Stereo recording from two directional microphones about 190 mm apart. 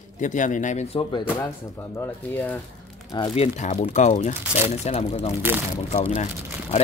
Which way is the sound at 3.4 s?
35° left (ahead or behind).